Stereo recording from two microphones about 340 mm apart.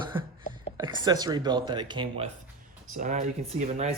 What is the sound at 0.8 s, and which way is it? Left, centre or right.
Speech, centre.